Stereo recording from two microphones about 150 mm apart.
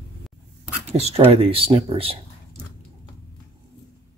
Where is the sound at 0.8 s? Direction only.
45° right (ahead or behind).